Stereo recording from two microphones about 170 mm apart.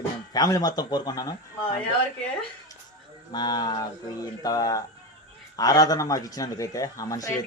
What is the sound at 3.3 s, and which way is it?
A man's voice, 25° left (ahead or behind).